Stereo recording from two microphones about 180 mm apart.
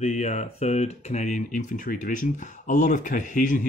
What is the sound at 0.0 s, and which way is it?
Speech, 40° left (ahead or behind).